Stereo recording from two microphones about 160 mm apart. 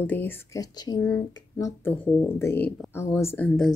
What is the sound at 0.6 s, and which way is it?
Speech, 25° left (ahead or behind).